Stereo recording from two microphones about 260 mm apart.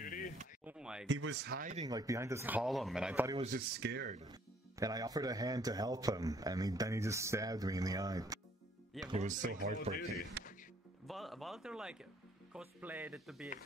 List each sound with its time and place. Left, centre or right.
0.0 s a sound: left
0.7 s a sound: centre
1.0 s speech: right
1.9 s speech: centre
3.3 s speech: right
4.2 s speech: centre
9.0 s speech: right
10.4 s music: right
11.1 s a sound: centre
12.5 s speech: centre